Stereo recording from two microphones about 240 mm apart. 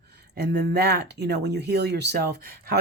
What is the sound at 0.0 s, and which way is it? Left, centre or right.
Speech, right.